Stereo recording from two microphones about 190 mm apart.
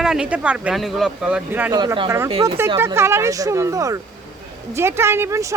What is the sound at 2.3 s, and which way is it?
Speech, 30° right (ahead or behind).